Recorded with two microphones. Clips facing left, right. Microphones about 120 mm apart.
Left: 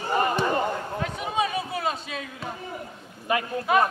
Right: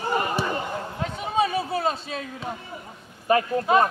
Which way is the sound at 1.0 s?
35° right (ahead or behind).